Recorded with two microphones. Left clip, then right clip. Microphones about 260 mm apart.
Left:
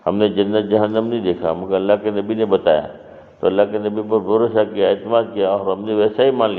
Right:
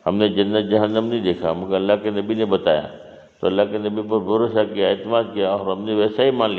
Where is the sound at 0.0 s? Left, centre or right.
Right.